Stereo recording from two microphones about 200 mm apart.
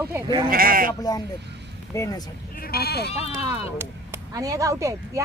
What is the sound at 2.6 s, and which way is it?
Speech, 50° left (ahead or behind).